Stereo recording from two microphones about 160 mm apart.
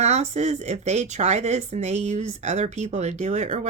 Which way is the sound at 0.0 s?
45° right (ahead or behind).